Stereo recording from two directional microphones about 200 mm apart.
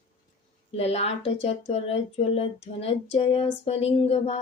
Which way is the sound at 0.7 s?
30° left (ahead or behind).